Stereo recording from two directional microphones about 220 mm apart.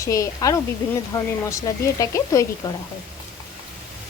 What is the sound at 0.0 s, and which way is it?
Dishes, 15° left (ahead or behind).